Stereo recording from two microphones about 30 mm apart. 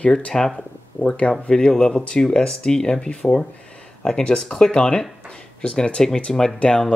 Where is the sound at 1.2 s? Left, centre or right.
Left.